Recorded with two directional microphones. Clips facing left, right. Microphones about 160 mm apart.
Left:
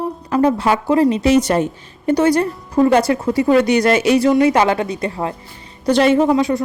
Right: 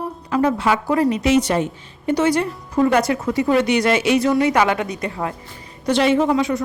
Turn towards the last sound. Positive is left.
turn(degrees=35)  # may be behind; listen again after turning